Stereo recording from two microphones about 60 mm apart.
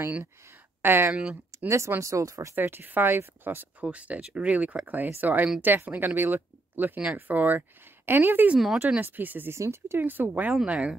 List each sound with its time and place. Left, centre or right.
0.8 s speech: right
1.5 s a sound: right
1.9 s speech: right
2.5 s speech: right
3.8 s speech: right
8.5 s speech: centre
9.0 s speech: right
9.5 s speech: right
10.5 s speech: centre